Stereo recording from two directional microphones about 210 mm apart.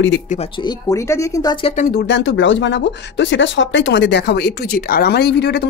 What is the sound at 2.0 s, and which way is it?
Speech, 55° left (ahead or behind).